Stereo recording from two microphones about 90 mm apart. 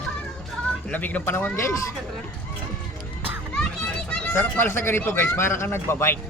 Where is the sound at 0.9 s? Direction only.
20° left (ahead or behind).